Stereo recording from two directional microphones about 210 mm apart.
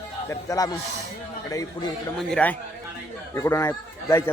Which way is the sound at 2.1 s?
5° left (ahead or behind).